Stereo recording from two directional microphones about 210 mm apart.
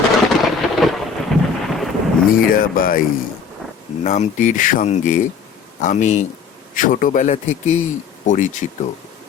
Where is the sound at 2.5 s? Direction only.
40° left (ahead or behind).